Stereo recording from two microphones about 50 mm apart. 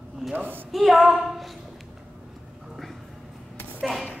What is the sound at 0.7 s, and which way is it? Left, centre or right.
Speech, centre.